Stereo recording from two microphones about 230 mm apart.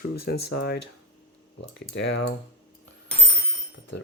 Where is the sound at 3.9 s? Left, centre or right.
Left.